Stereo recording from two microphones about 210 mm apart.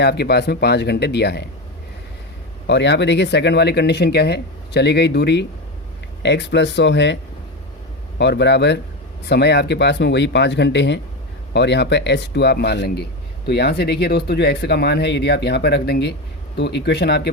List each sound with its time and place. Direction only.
0.0 s speech: 50° left (ahead or behind)
2.6 s speech: 55° left (ahead or behind)
8.2 s speech: 55° left (ahead or behind)